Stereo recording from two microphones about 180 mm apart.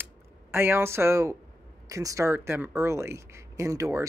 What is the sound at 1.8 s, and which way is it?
Speech, 15° right (ahead or behind).